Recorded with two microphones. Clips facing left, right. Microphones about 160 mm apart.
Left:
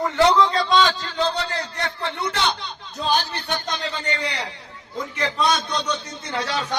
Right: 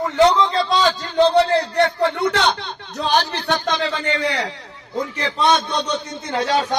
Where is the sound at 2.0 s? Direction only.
65° right (ahead or behind); by 4.1 s 90° right.